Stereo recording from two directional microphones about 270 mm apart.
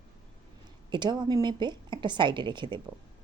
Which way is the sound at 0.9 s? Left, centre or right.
Centre.